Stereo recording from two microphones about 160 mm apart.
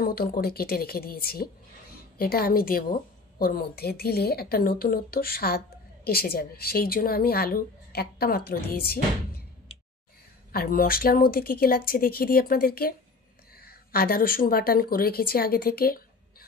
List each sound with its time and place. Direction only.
0.0 s a woman's voice: 70° left (ahead or behind)
10.5 s a woman's voice: 65° left (ahead or behind)